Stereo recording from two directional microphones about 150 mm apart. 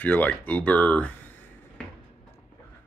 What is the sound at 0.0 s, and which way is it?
Speech, 10° left (ahead or behind).